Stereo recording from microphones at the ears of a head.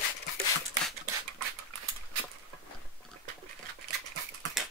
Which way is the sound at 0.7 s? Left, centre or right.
Right.